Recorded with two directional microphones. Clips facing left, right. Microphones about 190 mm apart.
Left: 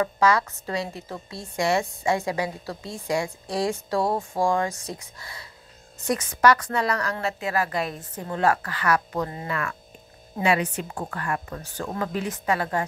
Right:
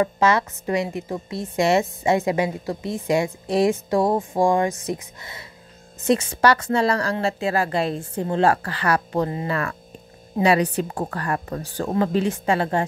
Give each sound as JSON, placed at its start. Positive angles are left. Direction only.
{"t": 0.0, "sound": "a woman's voice", "side_deg": -25}